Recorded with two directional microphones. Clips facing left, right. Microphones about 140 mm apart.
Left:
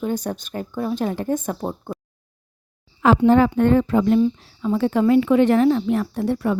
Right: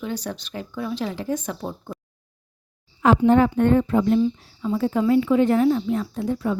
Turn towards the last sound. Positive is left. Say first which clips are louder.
# left 3 dB
turn(degrees=65)  # may be behind; listen again after turning